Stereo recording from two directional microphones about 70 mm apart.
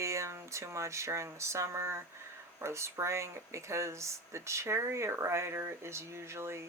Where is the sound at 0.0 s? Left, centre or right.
Right.